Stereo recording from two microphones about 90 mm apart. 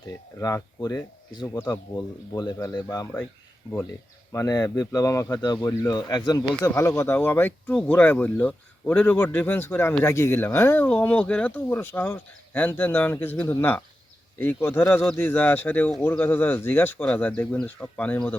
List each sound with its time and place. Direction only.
0.3 s speech: 40° left (ahead or behind)
2.3 s speech: 45° left (ahead or behind)
4.3 s speech: 40° left (ahead or behind)
5.4 s speech: 50° left (ahead or behind)
6.6 s speech: 30° left (ahead or behind)
7.7 s speech: 10° left (ahead or behind)